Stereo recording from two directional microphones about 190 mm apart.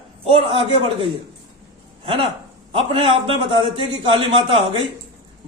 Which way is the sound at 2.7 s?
30° right (ahead or behind).